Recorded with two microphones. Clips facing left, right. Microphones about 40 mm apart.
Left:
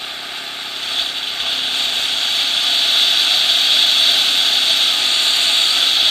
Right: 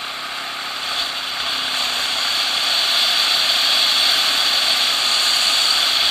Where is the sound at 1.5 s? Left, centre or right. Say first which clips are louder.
Left 2 dB; left.